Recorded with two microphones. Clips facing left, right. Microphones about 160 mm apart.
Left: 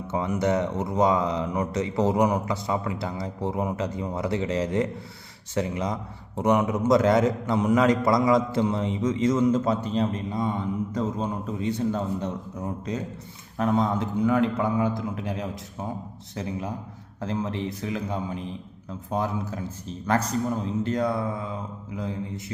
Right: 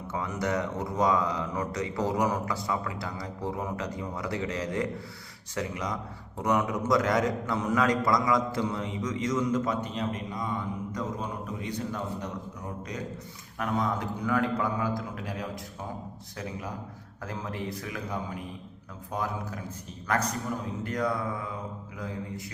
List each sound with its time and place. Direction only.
0.1 s a man's voice: 25° left (ahead or behind)
20.8 s a man's voice: 25° left (ahead or behind)